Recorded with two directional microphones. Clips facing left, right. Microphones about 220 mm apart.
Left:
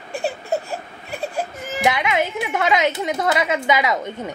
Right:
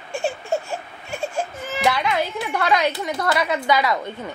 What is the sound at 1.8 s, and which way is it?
Speech, 20° left (ahead or behind).